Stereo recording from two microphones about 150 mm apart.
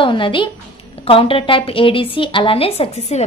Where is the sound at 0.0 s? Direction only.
35° left (ahead or behind).